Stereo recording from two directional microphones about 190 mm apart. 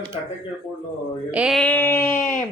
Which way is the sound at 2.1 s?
40° left (ahead or behind).